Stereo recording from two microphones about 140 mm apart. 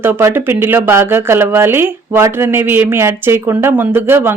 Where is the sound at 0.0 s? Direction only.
15° right (ahead or behind).